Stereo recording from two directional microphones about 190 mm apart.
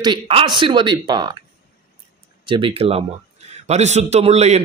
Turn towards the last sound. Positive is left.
turn(degrees=-35)  # may be behind; listen again after turning